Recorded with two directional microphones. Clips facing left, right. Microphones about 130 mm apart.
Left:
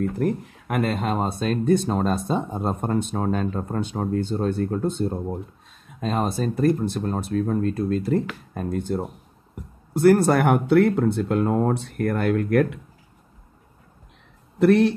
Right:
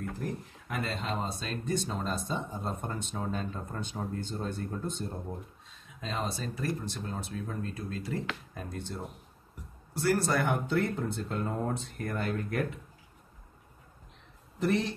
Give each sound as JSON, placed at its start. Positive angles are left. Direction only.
{"t": 0.2, "sound": "speech", "side_deg": 65}
{"t": 14.6, "sound": "speech", "side_deg": 65}